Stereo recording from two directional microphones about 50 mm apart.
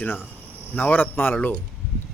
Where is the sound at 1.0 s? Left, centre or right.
Left.